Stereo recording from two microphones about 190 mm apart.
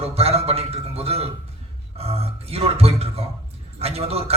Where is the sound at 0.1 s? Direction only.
30° right (ahead or behind).